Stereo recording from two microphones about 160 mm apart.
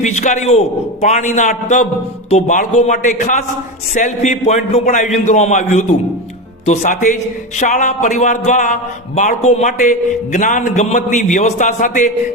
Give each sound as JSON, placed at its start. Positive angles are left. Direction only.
{"t": 0.0, "sound": "a man's voice", "side_deg": 45}